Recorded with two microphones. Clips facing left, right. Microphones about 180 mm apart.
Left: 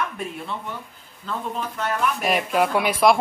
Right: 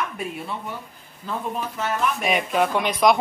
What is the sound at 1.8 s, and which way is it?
Speech, centre (ahead or behind).